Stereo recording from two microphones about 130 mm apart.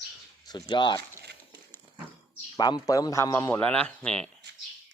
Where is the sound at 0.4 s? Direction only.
35° left (ahead or behind).